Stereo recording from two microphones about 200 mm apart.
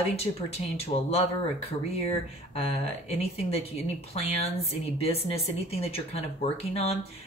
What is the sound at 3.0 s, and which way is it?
A woman's voice, 30° left (ahead or behind).